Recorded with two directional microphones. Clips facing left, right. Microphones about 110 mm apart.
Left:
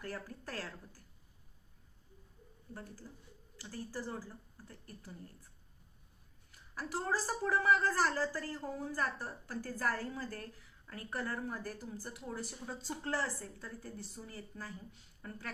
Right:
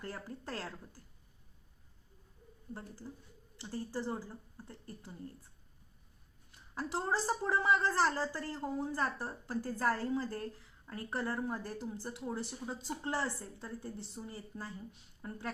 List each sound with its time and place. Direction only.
0.0 s speech: 25° right (ahead or behind)
3.1 s speech: 25° right (ahead or behind)
6.7 s speech: 25° right (ahead or behind)